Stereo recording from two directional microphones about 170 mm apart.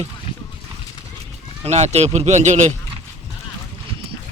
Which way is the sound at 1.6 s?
40° right (ahead or behind).